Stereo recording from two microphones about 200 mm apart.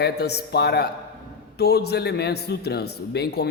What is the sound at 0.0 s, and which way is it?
A man's voice, 55° left (ahead or behind).